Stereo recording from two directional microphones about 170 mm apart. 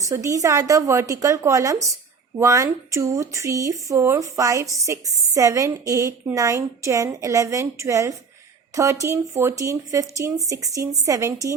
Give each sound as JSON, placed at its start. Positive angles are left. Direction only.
{"t": 0.0, "sound": "a woman's voice", "side_deg": -20}